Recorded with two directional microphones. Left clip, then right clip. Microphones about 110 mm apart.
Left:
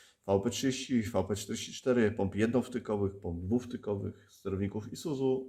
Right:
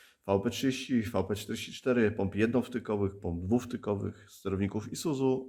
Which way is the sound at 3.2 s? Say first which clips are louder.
Right 3 dB; 40° right (ahead or behind).